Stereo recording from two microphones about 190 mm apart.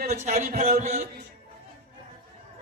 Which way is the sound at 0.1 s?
35° right (ahead or behind).